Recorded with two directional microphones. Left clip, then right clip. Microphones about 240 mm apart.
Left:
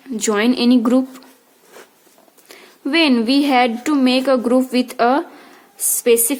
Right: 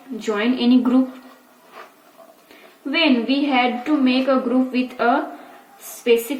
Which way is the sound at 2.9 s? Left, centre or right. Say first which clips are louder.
Left 3 dB; left.